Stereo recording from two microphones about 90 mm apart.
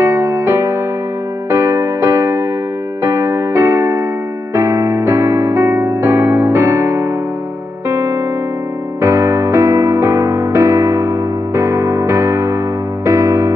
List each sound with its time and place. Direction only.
0.0 s music: 25° right (ahead or behind)